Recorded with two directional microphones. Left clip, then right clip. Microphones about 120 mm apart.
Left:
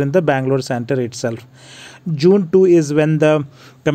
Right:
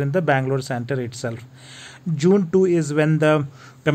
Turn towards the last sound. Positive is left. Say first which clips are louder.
# left 3 dB
turn(degrees=30)  # may be behind; listen again after turning